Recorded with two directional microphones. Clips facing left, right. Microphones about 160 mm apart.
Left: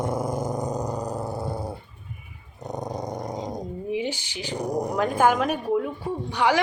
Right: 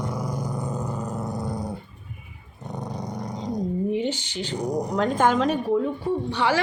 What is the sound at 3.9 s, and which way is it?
A woman's voice, 10° left (ahead or behind).